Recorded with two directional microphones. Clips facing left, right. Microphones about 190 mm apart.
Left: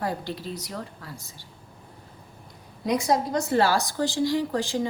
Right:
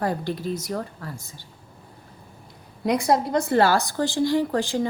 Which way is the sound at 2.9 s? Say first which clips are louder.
Right 3 dB; 55° right (ahead or behind).